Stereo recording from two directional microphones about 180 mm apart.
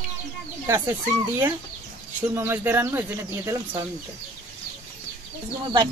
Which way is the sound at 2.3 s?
15° right (ahead or behind).